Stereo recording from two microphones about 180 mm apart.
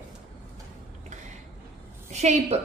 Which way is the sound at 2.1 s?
35° right (ahead or behind).